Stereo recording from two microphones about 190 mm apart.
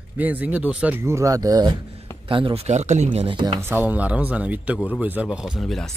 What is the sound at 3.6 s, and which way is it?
Speech, 10° right (ahead or behind).